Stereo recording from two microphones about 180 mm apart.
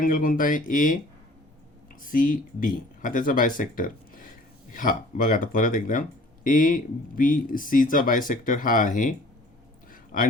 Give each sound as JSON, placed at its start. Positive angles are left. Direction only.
{"t": 0.0, "sound": "speech", "side_deg": 50}
{"t": 2.0, "sound": "speech", "side_deg": 50}
{"t": 9.9, "sound": "a sound", "side_deg": 50}